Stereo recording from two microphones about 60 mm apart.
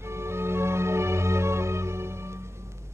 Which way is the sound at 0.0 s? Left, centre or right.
Right.